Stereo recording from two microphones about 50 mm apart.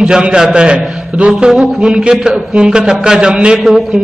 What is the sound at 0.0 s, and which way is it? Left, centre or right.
A man's voice, centre.